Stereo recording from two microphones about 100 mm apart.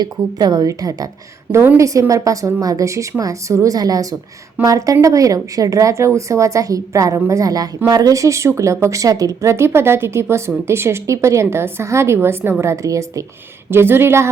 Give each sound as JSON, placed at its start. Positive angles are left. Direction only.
{"t": 0.0, "sound": "a woman's voice", "side_deg": -40}
{"t": 1.5, "sound": "a woman's voice", "side_deg": -20}